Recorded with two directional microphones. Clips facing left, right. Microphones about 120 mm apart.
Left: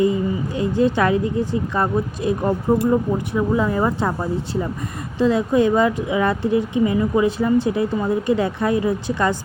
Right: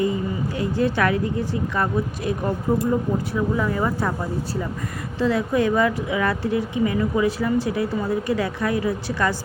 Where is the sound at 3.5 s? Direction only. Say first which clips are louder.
Left 5 dB; 25° left (ahead or behind).